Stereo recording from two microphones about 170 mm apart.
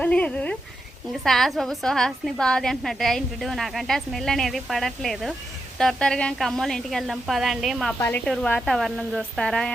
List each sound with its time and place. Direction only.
0.0 s a sound: 10° left (ahead or behind)
1.2 s a woman's voice: centre (ahead or behind)
7.9 s speech: 15° left (ahead or behind)
8.2 s a woman's voice: 5° left (ahead or behind)